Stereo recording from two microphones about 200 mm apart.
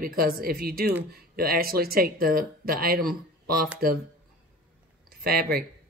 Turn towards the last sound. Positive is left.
turn(degrees=-50)  # may be behind; listen again after turning